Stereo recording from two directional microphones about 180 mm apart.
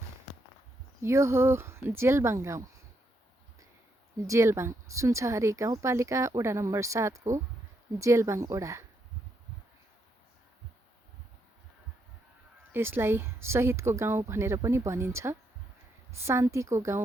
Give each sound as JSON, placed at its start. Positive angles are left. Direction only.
{"t": 1.0, "sound": "speech", "side_deg": -15}
{"t": 4.3, "sound": "speech", "side_deg": -15}
{"t": 12.7, "sound": "speech", "side_deg": -10}